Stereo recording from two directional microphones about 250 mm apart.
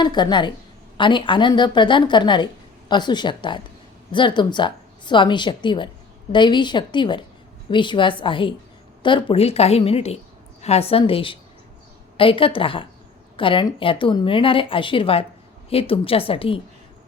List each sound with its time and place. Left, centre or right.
0.0 s a woman's voice: centre